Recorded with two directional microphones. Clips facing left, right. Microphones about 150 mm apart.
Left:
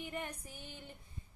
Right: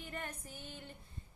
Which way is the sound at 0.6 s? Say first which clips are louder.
Right 2 dB; 15° left (ahead or behind).